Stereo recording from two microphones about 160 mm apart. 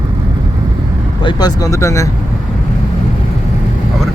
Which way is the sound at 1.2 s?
25° left (ahead or behind).